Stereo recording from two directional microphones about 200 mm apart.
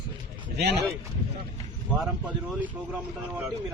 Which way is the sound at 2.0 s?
5° right (ahead or behind).